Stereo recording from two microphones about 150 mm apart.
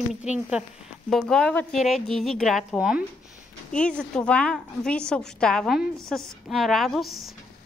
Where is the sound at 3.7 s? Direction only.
5° left (ahead or behind).